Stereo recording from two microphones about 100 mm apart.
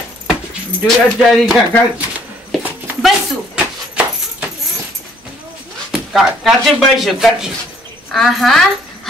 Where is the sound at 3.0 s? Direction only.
10° right (ahead or behind).